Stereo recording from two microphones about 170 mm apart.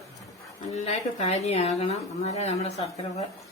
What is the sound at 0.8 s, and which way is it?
A woman's voice, 40° left (ahead or behind).